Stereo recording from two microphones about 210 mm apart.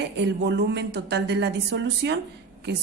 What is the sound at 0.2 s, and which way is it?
A woman's voice, 55° right (ahead or behind).